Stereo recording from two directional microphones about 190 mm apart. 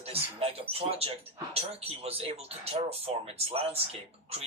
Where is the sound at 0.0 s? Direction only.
30° right (ahead or behind).